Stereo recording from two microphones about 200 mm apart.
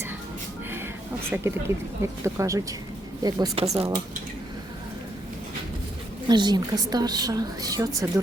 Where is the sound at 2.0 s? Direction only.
15° right (ahead or behind).